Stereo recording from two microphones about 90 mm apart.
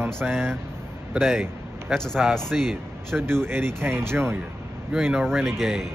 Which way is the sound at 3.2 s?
25° right (ahead or behind).